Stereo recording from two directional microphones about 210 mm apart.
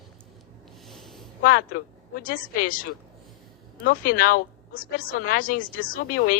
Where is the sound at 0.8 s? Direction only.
Centre (ahead or behind).